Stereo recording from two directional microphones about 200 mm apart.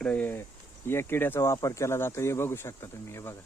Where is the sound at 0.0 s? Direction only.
5° left (ahead or behind).